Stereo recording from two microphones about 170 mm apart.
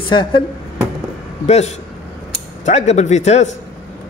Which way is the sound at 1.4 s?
40° left (ahead or behind).